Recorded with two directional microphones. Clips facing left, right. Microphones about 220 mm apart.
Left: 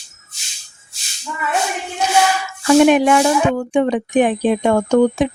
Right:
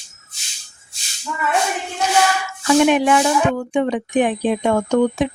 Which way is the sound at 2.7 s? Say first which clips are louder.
Left 3 dB; 45° left (ahead or behind).